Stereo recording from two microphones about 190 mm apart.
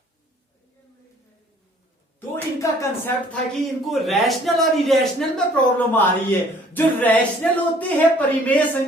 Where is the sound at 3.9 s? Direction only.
Centre (ahead or behind).